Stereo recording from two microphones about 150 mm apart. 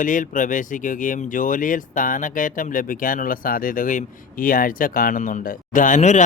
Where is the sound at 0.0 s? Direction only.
60° left (ahead or behind).